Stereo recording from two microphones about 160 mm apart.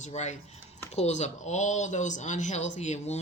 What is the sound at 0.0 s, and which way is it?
Speech, 45° left (ahead or behind).